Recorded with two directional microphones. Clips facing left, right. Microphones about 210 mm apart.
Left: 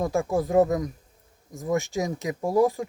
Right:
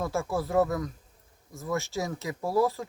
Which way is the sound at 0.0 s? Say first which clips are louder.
Left 5 dB; 15° left (ahead or behind).